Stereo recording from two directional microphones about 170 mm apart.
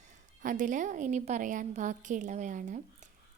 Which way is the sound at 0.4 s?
50° right (ahead or behind).